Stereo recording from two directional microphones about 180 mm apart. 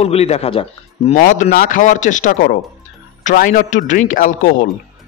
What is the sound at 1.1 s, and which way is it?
Speech, 45° left (ahead or behind).